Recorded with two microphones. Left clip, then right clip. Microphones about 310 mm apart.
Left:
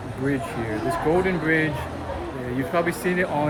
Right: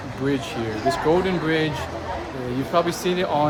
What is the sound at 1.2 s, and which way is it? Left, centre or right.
Speech, centre.